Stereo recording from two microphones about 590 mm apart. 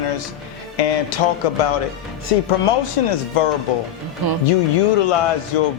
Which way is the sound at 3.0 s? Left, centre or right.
Left.